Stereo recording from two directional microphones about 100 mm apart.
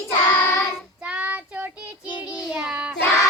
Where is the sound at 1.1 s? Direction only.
15° right (ahead or behind).